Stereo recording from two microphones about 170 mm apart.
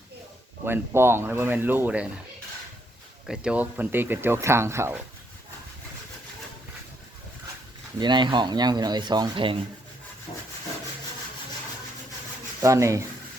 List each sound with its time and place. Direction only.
0.6 s speech: 15° right (ahead or behind)
3.2 s speech: 5° right (ahead or behind)
7.9 s speech: 25° right (ahead or behind)
12.6 s speech: 20° right (ahead or behind)